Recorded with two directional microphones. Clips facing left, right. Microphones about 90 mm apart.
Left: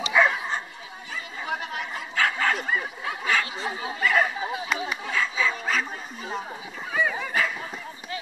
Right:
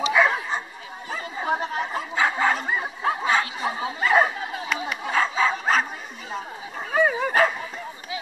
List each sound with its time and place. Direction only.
0.0 s bow-wow: 5° right (ahead or behind)
1.1 s chatter: 35° right (ahead or behind)
2.1 s bow-wow: 20° right (ahead or behind)
3.0 s a sound: 30° right (ahead or behind)
5.1 s a sound: 40° right (ahead or behind)
6.9 s dog: 45° right (ahead or behind)